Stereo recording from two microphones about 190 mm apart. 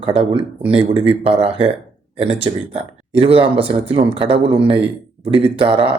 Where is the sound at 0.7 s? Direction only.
30° right (ahead or behind).